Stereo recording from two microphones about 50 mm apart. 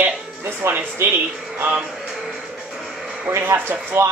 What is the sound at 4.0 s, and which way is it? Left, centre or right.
Speech, right.